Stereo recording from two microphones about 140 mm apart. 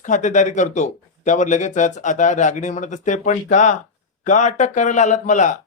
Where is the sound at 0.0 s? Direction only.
60° left (ahead or behind).